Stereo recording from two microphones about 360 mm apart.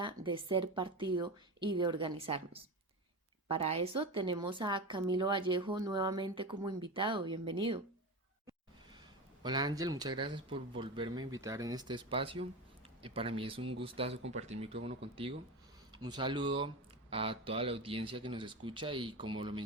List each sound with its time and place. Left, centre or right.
0.0 s a sound: centre
0.4 s speech: centre
9.4 s speech: centre